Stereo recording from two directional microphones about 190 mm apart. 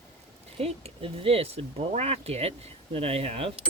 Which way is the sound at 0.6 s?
30° right (ahead or behind).